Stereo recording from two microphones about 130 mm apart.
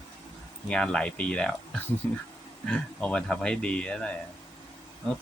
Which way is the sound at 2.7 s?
10° left (ahead or behind).